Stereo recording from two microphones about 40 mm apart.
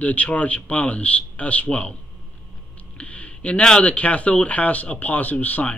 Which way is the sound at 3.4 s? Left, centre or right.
Left.